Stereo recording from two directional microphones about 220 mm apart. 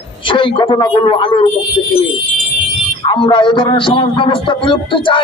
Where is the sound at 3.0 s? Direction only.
20° left (ahead or behind).